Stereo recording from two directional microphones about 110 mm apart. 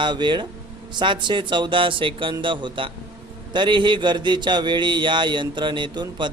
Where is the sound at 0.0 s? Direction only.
45° right (ahead or behind).